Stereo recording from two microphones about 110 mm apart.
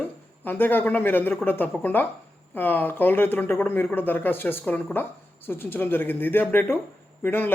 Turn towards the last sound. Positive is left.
turn(degrees=15)  # may be behind; listen again after turning